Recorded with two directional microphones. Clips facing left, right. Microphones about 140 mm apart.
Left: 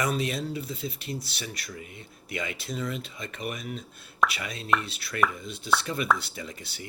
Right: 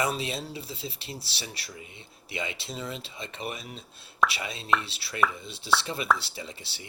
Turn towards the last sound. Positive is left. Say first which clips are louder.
# left 2 dB
turn(degrees=-25)  # may be behind; listen again after turning